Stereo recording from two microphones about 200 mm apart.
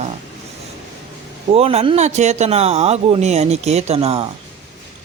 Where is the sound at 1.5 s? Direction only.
30° right (ahead or behind).